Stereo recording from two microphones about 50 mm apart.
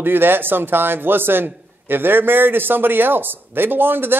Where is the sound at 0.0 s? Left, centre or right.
Right.